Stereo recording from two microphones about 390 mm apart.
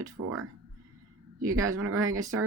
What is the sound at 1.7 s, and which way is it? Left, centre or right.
Speech, right.